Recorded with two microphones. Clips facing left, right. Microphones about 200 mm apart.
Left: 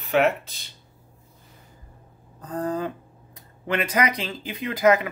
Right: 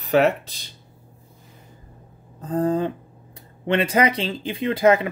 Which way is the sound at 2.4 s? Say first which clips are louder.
Right 6 dB; 25° right (ahead or behind).